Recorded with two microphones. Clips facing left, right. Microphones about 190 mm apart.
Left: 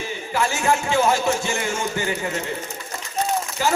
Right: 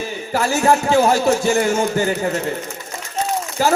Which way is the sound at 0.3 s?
40° right (ahead or behind).